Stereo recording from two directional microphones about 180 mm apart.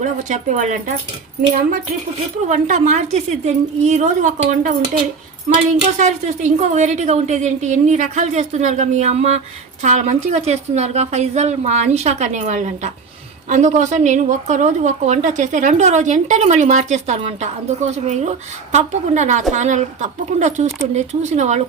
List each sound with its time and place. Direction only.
0.0 s speech: 40° right (ahead or behind)
2.5 s a woman's voice: 40° right (ahead or behind)
6.0 s a woman's voice: 40° right (ahead or behind)